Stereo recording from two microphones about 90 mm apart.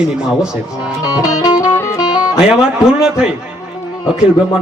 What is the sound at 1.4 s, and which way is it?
Music, 30° left (ahead or behind).